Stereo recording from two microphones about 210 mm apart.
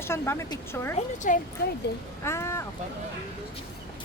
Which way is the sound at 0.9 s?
35° left (ahead or behind).